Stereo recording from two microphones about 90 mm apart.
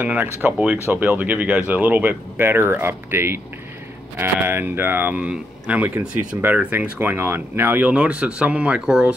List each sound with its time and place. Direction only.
0.0 s speech: 20° right (ahead or behind)